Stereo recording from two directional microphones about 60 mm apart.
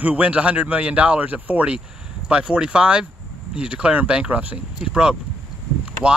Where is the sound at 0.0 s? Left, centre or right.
Right.